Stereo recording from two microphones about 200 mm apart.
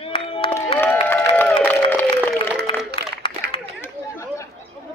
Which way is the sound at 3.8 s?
15° left (ahead or behind).